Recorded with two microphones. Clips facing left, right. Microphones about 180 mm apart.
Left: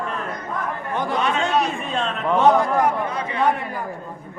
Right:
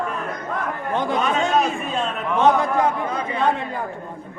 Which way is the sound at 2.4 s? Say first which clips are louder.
Even; 20° right (ahead or behind).